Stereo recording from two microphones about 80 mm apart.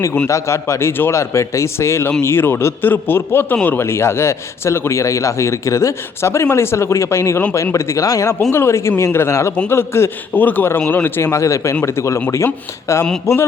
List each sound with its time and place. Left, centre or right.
0.3 s a man's voice: left
8.5 s a man's voice: left